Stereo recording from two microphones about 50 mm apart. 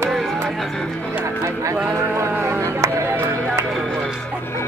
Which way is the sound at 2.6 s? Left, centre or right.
Right.